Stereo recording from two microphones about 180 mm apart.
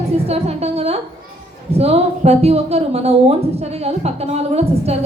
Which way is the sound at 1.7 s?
35° right (ahead or behind).